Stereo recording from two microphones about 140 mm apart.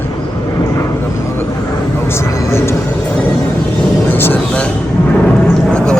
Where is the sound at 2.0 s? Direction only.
20° left (ahead or behind).